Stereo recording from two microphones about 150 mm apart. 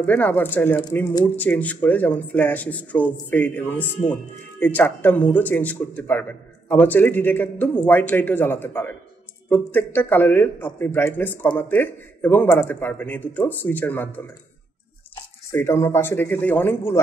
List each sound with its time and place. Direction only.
0.0 s speech: 10° left (ahead or behind)
15.5 s speech: 15° left (ahead or behind)